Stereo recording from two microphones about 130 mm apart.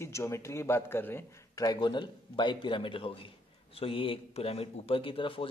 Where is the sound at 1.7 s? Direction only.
35° left (ahead or behind).